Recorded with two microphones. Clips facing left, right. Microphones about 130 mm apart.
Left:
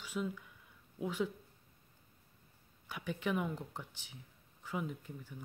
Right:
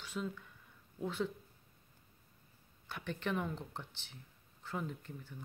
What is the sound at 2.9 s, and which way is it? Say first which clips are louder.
Speech: left 2 dB; 10° left (ahead or behind).